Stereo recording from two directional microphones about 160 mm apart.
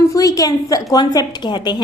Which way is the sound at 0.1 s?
20° left (ahead or behind).